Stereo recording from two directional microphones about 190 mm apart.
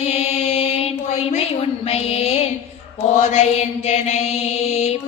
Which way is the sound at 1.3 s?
35° left (ahead or behind).